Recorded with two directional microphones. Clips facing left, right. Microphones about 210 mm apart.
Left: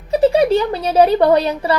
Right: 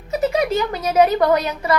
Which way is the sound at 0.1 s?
30° left (ahead or behind).